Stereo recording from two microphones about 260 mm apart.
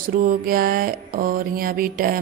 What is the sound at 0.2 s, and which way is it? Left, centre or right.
Mantra, right.